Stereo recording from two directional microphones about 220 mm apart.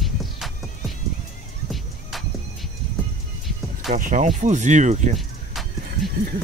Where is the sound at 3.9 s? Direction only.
40° right (ahead or behind).